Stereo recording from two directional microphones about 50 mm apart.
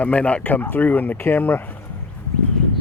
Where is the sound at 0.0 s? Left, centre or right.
Left.